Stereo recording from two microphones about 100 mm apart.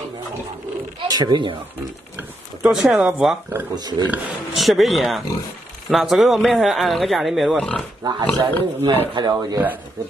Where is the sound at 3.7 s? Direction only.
45° right (ahead or behind).